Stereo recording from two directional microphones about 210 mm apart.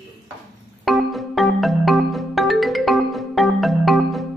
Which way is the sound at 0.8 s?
Centre (ahead or behind).